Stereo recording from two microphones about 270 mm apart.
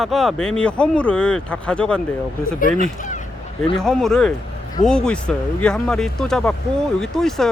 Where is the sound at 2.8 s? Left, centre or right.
Left.